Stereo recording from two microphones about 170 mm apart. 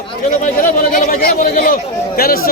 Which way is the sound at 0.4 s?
50° left (ahead or behind).